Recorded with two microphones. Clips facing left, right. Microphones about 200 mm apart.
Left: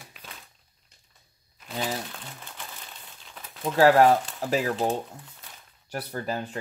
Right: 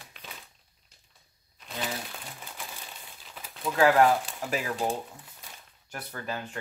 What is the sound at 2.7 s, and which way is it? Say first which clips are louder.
Crumpling: even; 5° right (ahead or behind).